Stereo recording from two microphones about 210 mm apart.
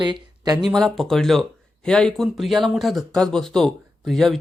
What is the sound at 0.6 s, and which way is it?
Speech, centre (ahead or behind).